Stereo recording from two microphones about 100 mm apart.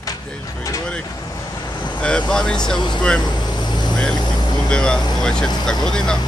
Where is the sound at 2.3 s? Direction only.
5° left (ahead or behind).